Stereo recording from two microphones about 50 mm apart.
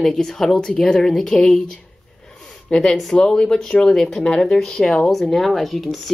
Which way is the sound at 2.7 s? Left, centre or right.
Centre.